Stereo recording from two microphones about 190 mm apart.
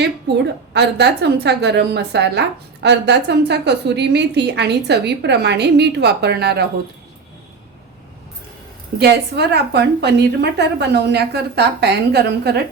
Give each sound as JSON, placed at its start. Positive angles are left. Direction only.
{"t": 0.7, "sound": "a woman's voice", "side_deg": -60}
{"t": 9.0, "sound": "a woman's voice", "side_deg": -60}